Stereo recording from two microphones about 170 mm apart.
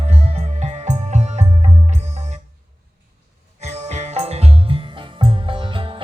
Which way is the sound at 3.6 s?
40° right (ahead or behind).